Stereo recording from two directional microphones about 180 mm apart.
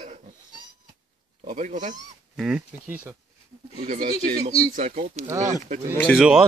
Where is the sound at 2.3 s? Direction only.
5° right (ahead or behind).